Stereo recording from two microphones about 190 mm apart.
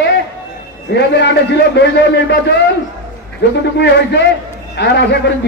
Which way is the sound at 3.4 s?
65° left (ahead or behind).